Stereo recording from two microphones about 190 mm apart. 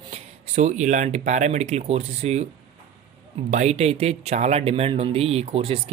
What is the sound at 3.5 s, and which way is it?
Speech, 35° right (ahead or behind).